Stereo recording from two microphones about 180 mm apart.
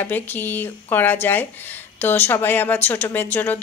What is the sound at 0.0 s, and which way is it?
A woman's voice, 10° left (ahead or behind).